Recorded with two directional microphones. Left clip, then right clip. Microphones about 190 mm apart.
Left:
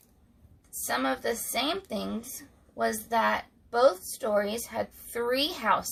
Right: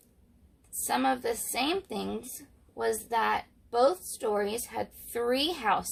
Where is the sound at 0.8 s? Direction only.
30° right (ahead or behind).